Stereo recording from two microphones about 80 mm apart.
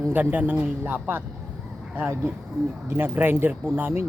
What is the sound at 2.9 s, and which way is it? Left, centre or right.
Speech, right.